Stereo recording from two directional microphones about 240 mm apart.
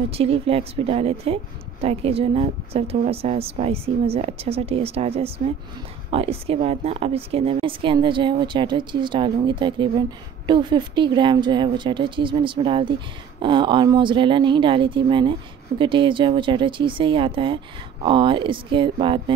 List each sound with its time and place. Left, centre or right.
0.1 s speech: right